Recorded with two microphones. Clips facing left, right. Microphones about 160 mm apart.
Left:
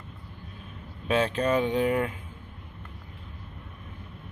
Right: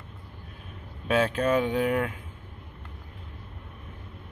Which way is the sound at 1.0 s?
5° right (ahead or behind).